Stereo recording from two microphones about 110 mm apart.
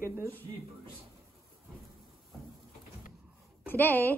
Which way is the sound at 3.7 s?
15° left (ahead or behind).